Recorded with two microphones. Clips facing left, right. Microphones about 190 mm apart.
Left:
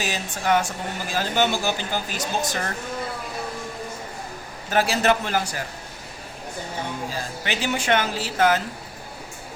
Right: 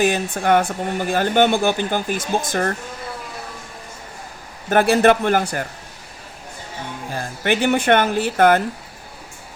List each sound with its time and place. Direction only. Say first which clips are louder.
0.0 s speech: right 8 dB; 55° right (ahead or behind)
4.7 s speech: right 6 dB; 55° right (ahead or behind)
7.1 s speech: right 7 dB; 55° right (ahead or behind)